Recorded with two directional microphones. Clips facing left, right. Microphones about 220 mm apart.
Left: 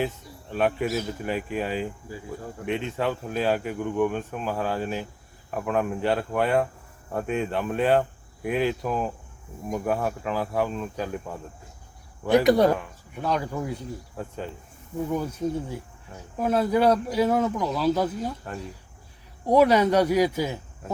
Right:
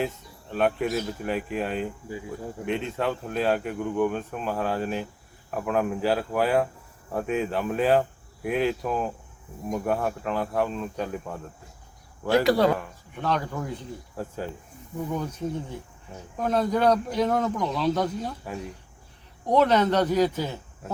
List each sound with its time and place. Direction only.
0.5 s speech: centre (ahead or behind)
12.5 s speech: 20° left (ahead or behind)
12.7 s speech: 5° left (ahead or behind)
14.2 s speech: 5° right (ahead or behind)
15.1 s speech: 10° left (ahead or behind)
19.5 s speech: 10° left (ahead or behind)